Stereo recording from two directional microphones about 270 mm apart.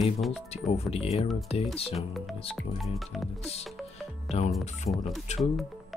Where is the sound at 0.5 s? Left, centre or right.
Left.